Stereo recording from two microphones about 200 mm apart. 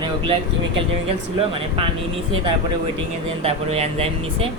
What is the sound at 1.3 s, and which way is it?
Speech, 25° right (ahead or behind).